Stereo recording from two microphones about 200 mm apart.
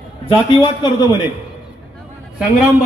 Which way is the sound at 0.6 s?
20° left (ahead or behind).